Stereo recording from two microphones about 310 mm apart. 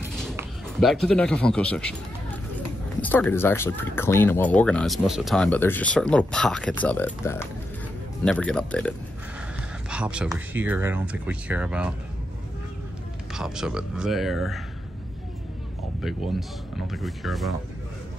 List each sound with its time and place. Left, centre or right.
0.0 s a sound: centre
3.0 s speech: centre
13.3 s speech: centre
16.0 s speech: centre